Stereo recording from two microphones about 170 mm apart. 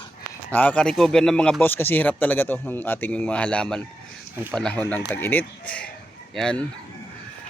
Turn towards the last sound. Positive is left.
turn(degrees=5)  # may be behind; listen again after turning